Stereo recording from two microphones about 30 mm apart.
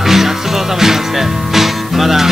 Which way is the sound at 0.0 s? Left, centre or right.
Centre.